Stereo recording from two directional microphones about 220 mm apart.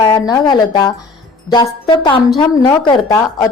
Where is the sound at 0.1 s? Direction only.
20° left (ahead or behind).